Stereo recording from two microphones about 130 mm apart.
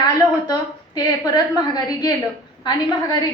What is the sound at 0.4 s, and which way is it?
A woman's voice, 30° left (ahead or behind).